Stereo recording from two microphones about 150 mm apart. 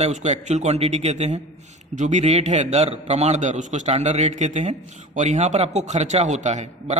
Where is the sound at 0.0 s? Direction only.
50° right (ahead or behind).